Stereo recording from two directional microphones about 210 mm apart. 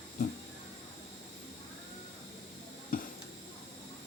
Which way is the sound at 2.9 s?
40° left (ahead or behind).